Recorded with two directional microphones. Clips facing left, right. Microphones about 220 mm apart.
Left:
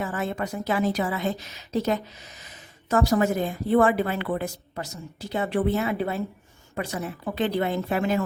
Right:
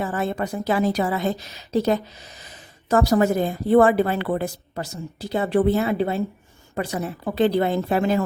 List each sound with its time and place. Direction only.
0.0 s a woman's voice: 35° right (ahead or behind)